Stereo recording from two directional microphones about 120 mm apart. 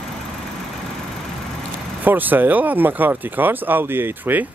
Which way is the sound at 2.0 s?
15° right (ahead or behind).